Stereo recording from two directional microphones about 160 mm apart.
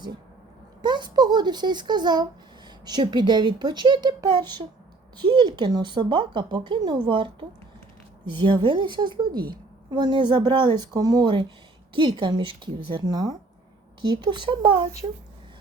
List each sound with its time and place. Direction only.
0.8 s a woman's voice: 30° right (ahead or behind)